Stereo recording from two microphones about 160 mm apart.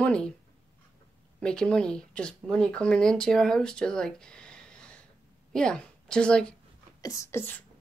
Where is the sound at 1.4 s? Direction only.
5° left (ahead or behind).